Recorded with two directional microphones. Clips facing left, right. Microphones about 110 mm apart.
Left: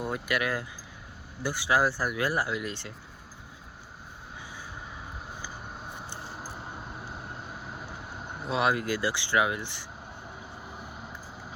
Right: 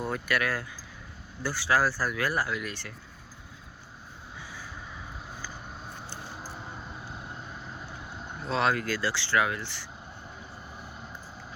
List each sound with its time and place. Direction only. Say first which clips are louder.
0.0 s speech: even; 20° left (ahead or behind)
5.9 s a sound: left 1 dB; 15° left (ahead or behind)
8.3 s speech: even; 10° left (ahead or behind)